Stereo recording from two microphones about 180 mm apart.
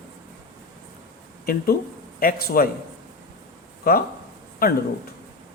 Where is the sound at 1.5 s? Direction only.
60° left (ahead or behind).